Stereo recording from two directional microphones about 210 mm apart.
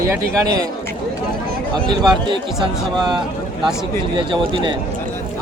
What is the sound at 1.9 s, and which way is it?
Speech, 20° right (ahead or behind).